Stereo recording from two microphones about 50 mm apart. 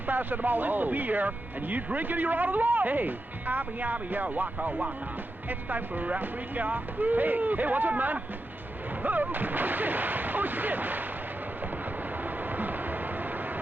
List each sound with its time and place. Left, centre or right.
0.1 s speech: right
12.5 s vehicle: right